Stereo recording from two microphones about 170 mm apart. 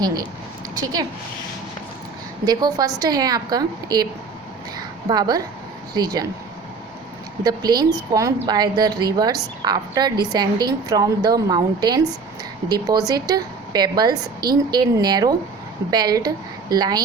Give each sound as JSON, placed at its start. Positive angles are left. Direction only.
{"t": 0.0, "sound": "a woman's voice", "side_deg": -25}
{"t": 2.4, "sound": "a woman's voice", "side_deg": -25}
{"t": 7.4, "sound": "a woman's voice", "side_deg": -25}